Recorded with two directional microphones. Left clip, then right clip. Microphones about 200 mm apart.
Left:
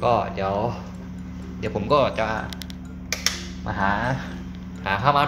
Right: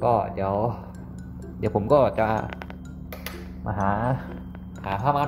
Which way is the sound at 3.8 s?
20° right (ahead or behind).